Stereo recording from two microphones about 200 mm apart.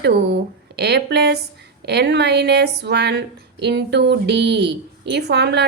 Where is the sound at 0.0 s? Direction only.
55° right (ahead or behind).